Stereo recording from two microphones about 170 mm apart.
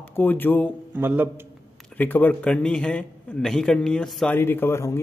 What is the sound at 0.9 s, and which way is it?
Speech, 10° right (ahead or behind).